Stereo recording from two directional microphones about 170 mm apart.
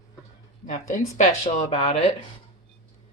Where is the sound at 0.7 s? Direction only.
45° left (ahead or behind).